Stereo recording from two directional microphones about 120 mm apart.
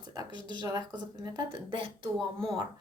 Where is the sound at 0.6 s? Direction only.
35° right (ahead or behind).